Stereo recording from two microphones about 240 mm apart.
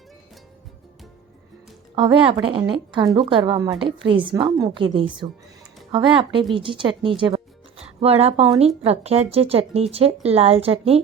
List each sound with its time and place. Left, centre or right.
2.0 s a woman's voice: right